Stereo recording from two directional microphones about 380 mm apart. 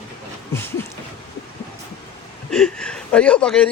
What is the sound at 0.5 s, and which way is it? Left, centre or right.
Speech, centre.